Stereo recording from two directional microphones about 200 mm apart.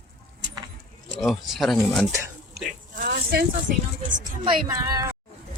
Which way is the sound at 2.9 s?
50° right (ahead or behind).